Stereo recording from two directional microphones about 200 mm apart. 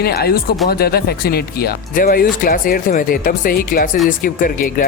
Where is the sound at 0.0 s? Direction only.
50° left (ahead or behind).